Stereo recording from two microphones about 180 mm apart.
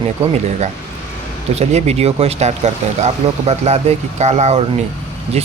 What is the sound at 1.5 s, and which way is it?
Speech, 35° right (ahead or behind).